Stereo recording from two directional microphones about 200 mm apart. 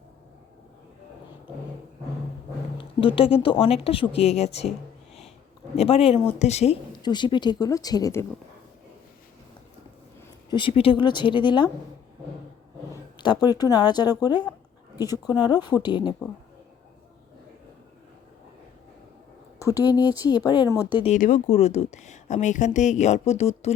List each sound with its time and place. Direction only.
2.7 s speech: 25° left (ahead or behind)
5.7 s speech: 30° left (ahead or behind)
7.0 s speech: 20° left (ahead or behind)
10.5 s speech: 25° left (ahead or behind)
13.1 s a woman's voice: 20° left (ahead or behind)
19.6 s speech: 15° left (ahead or behind)
21.0 s speech: 40° left (ahead or behind)